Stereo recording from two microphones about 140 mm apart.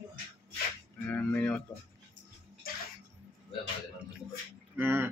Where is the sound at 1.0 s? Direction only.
15° left (ahead or behind).